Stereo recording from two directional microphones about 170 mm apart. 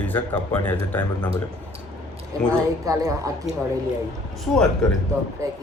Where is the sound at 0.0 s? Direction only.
10° left (ahead or behind).